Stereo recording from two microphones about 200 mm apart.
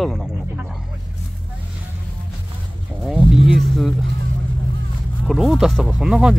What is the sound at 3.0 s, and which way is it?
Speech, centre (ahead or behind).